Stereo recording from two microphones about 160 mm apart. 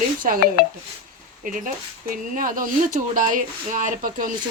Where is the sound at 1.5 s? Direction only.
55° right (ahead or behind).